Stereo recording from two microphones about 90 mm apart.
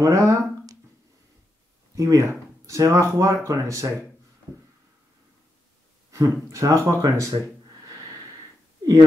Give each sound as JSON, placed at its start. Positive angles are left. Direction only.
{"t": 0.0, "sound": "a sound", "side_deg": -35}
{"t": 2.0, "sound": "speech", "side_deg": -35}
{"t": 6.1, "sound": "speech", "side_deg": -35}